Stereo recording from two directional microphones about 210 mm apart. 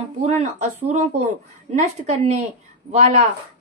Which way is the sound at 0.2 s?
35° right (ahead or behind).